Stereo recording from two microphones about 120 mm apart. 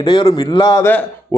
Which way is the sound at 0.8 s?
15° left (ahead or behind).